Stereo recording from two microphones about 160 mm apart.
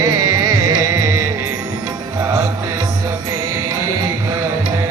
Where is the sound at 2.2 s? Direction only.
20° right (ahead or behind).